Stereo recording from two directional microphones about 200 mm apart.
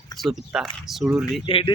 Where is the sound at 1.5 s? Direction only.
25° left (ahead or behind).